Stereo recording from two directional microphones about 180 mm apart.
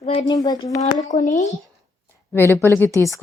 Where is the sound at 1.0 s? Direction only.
45° left (ahead or behind).